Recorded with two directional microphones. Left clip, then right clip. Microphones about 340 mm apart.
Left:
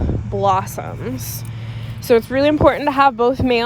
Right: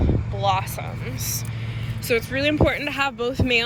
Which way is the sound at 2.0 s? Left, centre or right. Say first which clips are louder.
Left 8 dB; centre.